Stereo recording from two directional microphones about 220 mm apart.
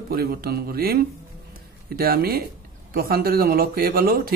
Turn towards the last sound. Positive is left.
turn(degrees=-40)  # may be behind; listen again after turning